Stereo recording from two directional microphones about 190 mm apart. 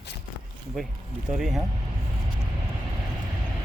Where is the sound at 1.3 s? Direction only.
Centre (ahead or behind).